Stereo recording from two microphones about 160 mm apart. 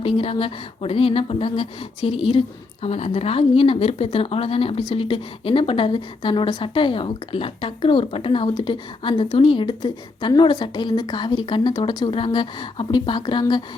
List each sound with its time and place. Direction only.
0.0 s speech: 35° left (ahead or behind)